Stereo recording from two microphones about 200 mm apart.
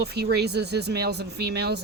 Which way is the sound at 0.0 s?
55° right (ahead or behind).